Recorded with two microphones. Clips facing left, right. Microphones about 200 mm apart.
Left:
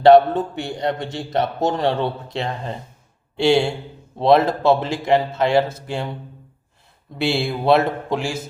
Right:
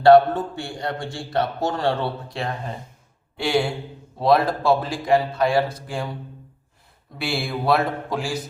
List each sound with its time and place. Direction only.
0.0 s a man's voice: 20° left (ahead or behind)
7.2 s a man's voice: 25° left (ahead or behind)